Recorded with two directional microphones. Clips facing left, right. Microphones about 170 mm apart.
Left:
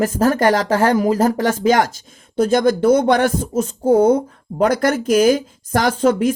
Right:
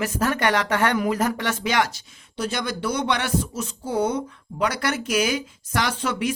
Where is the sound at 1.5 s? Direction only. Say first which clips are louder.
Left 8 dB; 45° left (ahead or behind).